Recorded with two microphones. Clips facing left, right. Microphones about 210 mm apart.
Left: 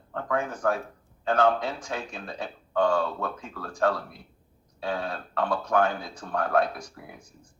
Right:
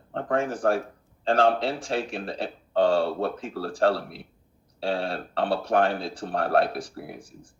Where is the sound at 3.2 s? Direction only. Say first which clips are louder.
Right 5 dB; 80° right.